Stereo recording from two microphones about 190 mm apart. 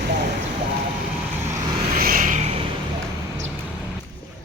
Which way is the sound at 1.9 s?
45° right (ahead or behind).